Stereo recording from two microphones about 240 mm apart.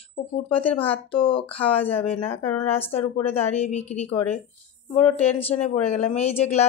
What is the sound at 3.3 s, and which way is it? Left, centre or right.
Speech, left.